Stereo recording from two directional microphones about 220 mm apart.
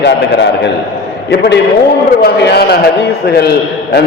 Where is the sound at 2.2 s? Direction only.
50° left (ahead or behind).